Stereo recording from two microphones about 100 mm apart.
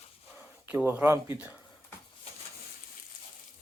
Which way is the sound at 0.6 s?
15° right (ahead or behind).